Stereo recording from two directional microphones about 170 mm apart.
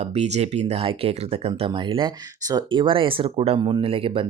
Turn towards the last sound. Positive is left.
turn(degrees=-35)  # may be behind; listen again after turning